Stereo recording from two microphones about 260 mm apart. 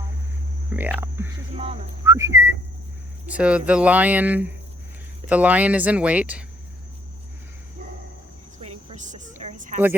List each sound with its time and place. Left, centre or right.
0.7 s speech: centre
8.9 s a woman's voice: right